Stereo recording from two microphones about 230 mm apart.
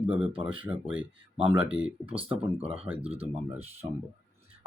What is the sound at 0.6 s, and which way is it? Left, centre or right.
Speech, centre.